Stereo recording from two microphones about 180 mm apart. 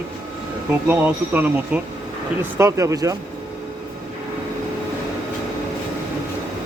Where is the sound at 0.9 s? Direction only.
10° right (ahead or behind).